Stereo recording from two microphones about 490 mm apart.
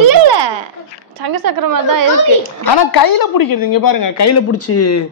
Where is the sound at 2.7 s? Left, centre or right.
Left.